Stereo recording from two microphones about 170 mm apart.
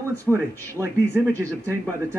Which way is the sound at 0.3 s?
15° right (ahead or behind).